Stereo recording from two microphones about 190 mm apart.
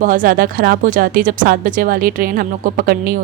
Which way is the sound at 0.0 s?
45° right (ahead or behind).